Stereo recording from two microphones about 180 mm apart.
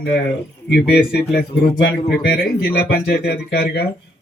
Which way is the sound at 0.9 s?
60° left (ahead or behind).